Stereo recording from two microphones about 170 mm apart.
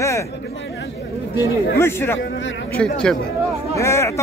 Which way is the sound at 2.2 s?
90° left.